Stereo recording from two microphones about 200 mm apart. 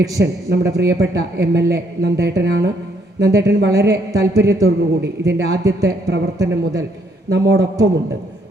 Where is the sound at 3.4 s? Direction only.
55° right (ahead or behind).